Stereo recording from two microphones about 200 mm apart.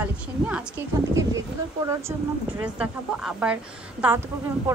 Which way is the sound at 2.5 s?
5° right (ahead or behind).